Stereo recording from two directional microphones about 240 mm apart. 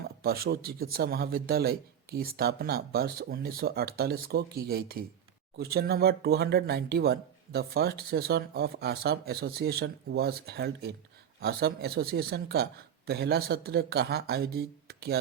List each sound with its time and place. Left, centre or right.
0.2 s speech: right